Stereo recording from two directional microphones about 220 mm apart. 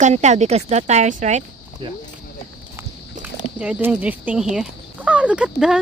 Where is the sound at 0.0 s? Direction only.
30° right (ahead or behind).